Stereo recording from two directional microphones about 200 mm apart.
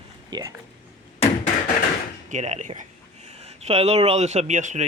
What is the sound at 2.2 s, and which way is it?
Speech, 35° right (ahead or behind).